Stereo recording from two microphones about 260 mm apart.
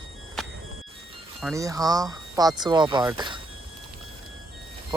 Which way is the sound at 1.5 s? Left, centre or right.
Centre.